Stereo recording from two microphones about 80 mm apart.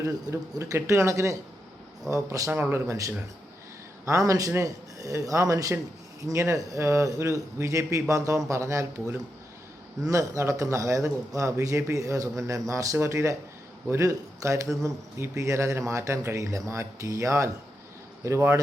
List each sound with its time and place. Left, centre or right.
0.0 s a man's voice: right
2.5 s a man's voice: right